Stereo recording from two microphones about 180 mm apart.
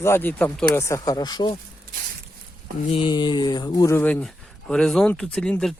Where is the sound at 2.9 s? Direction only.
30° left (ahead or behind).